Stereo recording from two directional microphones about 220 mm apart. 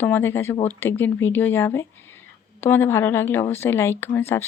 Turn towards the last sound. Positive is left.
turn(degrees=10)  # may be behind; listen again after turning